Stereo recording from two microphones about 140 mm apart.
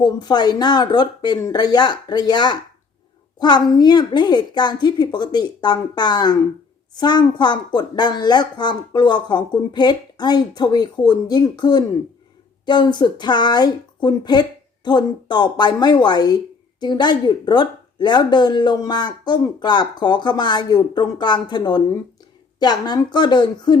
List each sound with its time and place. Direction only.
0.0 s speech: 30° left (ahead or behind)